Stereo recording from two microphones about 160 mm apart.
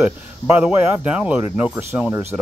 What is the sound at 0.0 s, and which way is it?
Speech, 10° right (ahead or behind).